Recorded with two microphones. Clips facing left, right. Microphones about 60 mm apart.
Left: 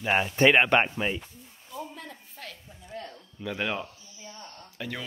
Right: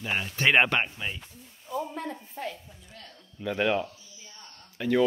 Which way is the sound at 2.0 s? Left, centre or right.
Right.